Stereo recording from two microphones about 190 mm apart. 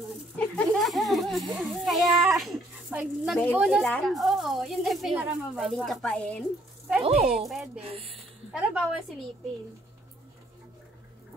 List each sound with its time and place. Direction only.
0.6 s children playing: centre (ahead or behind)
3.5 s speech: centre (ahead or behind)
7.0 s a woman's voice: 35° right (ahead or behind)
7.4 s speech: centre (ahead or behind)
7.8 s a woman's voice: 30° right (ahead or behind)
8.5 s a woman's voice: centre (ahead or behind)